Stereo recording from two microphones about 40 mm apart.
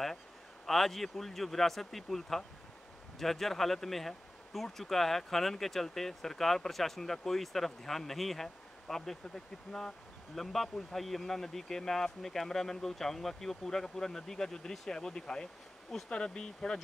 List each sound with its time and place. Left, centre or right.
0.7 s speech: centre; by 16.8 s left